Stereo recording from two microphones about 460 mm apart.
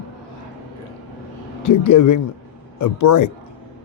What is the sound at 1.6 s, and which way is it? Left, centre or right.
A man's voice, left.